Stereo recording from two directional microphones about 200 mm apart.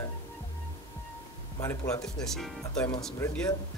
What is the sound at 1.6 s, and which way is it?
Speech, 15° left (ahead or behind).